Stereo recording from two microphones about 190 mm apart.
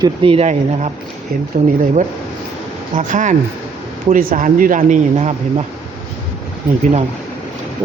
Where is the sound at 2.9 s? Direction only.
40° right (ahead or behind).